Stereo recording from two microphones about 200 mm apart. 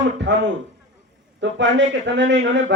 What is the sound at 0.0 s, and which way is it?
A man's voice, 65° right (ahead or behind).